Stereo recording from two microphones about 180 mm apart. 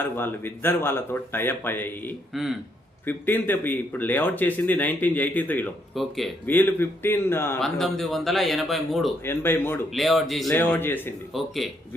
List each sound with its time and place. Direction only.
0.0 s speech: 10° left (ahead or behind)
2.3 s a man's voice: centre (ahead or behind)
3.1 s speech: 10° left (ahead or behind)
7.6 s a man's voice: centre (ahead or behind)
9.2 s speech: 10° left (ahead or behind)
9.9 s a man's voice: centre (ahead or behind)
10.5 s speech: 10° left (ahead or behind)
11.3 s a man's voice: centre (ahead or behind)